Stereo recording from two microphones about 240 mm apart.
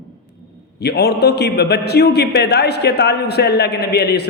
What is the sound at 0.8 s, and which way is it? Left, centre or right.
A man's voice, left.